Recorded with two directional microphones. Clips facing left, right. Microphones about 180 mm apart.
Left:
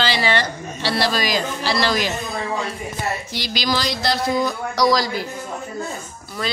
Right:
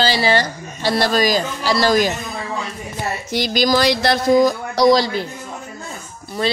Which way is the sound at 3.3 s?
50° right (ahead or behind).